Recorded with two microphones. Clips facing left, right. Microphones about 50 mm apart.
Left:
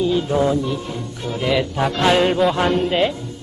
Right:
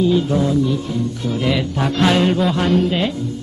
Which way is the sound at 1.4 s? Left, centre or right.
Centre.